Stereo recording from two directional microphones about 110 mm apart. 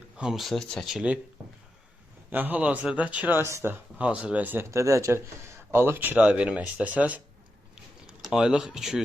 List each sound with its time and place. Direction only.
0.2 s speech: 5° right (ahead or behind)
2.3 s a man's voice: 15° right (ahead or behind)
3.9 s a man's voice: 10° right (ahead or behind)